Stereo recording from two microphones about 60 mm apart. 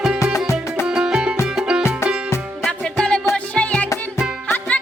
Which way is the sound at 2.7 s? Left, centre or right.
Centre.